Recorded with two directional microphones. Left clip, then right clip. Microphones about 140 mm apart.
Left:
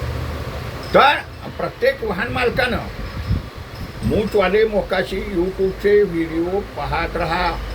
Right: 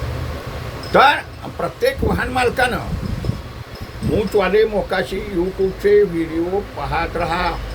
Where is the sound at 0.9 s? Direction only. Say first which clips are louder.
Right 1 dB; 20° right (ahead or behind).